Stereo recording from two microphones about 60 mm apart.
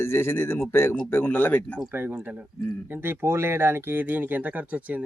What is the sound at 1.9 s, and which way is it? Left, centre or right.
Speech, right.